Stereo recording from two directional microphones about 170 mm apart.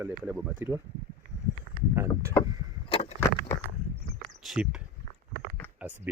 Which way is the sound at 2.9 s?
40° left (ahead or behind).